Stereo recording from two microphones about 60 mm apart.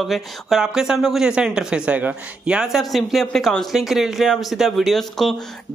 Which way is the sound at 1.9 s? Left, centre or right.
Right.